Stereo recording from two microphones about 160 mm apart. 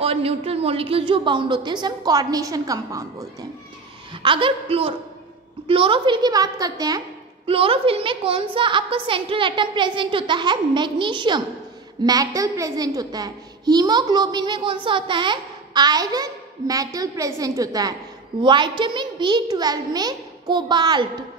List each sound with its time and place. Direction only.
0.0 s a child's voice: 35° right (ahead or behind); by 3.3 s 20° right (ahead or behind)
4.1 s a woman's voice: 30° right (ahead or behind)
7.4 s a woman's voice: 35° right (ahead or behind)